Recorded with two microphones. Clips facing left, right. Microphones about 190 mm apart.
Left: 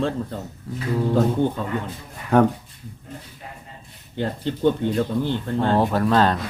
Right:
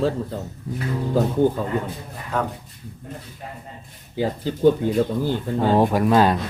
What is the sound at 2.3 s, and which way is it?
Speech, 60° left (ahead or behind).